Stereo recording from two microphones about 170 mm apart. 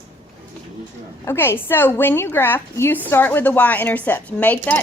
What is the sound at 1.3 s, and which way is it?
A woman's voice, 15° left (ahead or behind).